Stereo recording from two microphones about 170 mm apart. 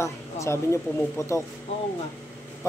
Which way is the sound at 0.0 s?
15° left (ahead or behind).